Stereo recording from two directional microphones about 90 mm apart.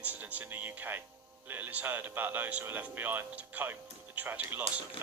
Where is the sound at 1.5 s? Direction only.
20° right (ahead or behind).